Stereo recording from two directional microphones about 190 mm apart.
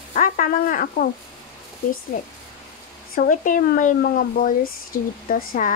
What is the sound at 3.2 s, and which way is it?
Speech, 45° left (ahead or behind).